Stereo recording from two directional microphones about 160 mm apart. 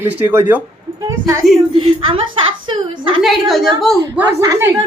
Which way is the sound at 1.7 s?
35° right (ahead or behind).